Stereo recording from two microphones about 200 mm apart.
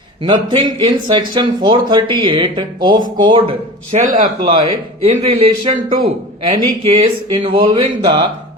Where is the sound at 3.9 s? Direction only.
40° right (ahead or behind).